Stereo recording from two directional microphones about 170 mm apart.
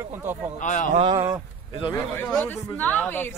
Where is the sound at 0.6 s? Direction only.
45° left (ahead or behind).